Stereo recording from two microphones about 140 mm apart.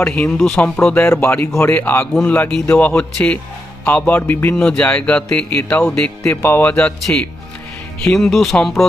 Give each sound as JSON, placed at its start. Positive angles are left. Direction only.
{"t": 0.0, "sound": "speech", "side_deg": 5}
{"t": 6.2, "sound": "speech", "side_deg": 15}
{"t": 6.7, "sound": "speech", "side_deg": 5}